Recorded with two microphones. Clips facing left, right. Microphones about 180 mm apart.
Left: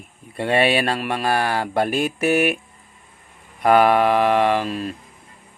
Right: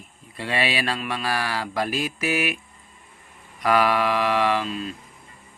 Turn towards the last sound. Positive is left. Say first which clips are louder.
# left 4 dB
turn(degrees=60)  # may be behind; listen again after turning